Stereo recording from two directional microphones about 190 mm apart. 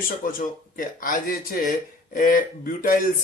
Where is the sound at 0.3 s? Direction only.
45° left (ahead or behind).